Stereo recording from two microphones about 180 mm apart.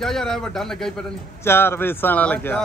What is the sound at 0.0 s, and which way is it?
Speech, centre (ahead or behind).